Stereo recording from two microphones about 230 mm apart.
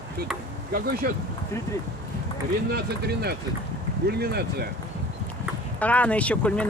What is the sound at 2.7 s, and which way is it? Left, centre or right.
Speech, right.